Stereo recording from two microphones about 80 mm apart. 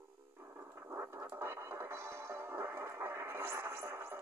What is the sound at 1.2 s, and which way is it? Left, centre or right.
Music, right.